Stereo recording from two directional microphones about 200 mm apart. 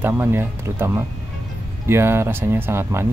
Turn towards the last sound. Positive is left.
turn(degrees=-10)  # may be behind; listen again after turning